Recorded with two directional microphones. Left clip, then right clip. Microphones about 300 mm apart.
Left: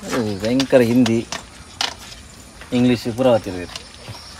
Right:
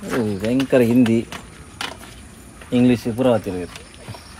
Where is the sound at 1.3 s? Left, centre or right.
Left.